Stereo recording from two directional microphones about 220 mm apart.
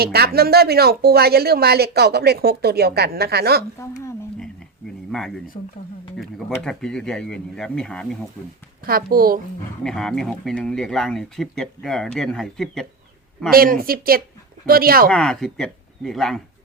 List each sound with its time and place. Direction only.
0.0 s speech: 45° right (ahead or behind)
3.8 s a sound: 10° left (ahead or behind)
5.5 s speech: 30° left (ahead or behind)
6.1 s speech: 5° left (ahead or behind)
8.9 s speech: 40° right (ahead or behind)
9.8 s speech: centre (ahead or behind)
13.5 s speech: 40° right (ahead or behind)
15.1 s speech: 5° left (ahead or behind)